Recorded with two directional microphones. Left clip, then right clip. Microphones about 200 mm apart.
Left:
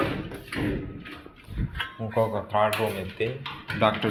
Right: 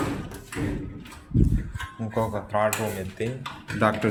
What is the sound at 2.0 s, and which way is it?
Speech, 25° right (ahead or behind).